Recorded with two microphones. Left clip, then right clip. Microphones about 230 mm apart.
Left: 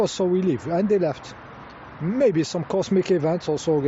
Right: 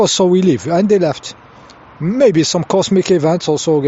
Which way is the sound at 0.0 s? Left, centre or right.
Right.